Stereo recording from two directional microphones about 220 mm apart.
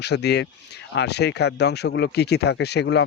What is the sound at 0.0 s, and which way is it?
Speech, 50° left (ahead or behind).